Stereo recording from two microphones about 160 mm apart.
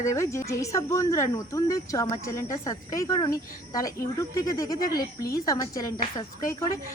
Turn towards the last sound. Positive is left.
turn(degrees=20)  # may be behind; listen again after turning